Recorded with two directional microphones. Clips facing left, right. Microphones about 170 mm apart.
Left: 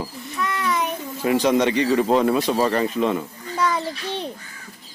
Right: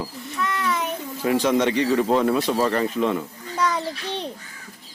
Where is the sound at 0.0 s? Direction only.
15° left (ahead or behind).